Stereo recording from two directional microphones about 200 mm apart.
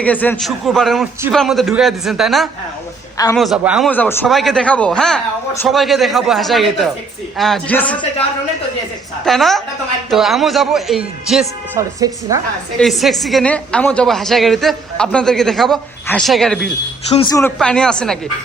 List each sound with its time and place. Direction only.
0.0 s a woman's voice: 10° left (ahead or behind)
3.8 s a woman's voice: 10° left (ahead or behind)
9.2 s a woman's voice: centre (ahead or behind)
11.8 s speech: 15° right (ahead or behind)
12.8 s a woman's voice: centre (ahead or behind)
17.2 s speech: 15° left (ahead or behind)
17.6 s a woman's voice: 5° left (ahead or behind)